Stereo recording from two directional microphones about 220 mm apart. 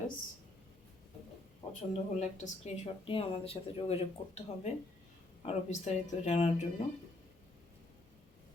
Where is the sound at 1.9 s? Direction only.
30° left (ahead or behind).